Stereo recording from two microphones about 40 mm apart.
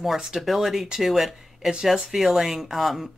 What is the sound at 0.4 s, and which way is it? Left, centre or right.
Speech, centre.